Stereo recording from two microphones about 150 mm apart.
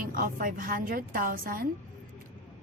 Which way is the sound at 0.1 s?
65° right (ahead or behind).